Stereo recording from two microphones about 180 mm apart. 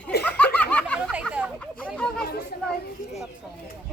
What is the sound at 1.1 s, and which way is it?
Fowl, 5° right (ahead or behind).